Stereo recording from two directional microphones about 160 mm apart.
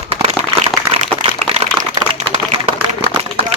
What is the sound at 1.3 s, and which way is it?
Typewriter, 35° right (ahead or behind).